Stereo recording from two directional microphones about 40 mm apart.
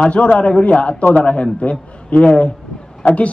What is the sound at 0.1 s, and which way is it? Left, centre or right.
Speech, left.